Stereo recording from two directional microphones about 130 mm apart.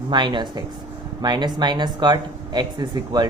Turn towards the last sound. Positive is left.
turn(degrees=-30)  # may be behind; listen again after turning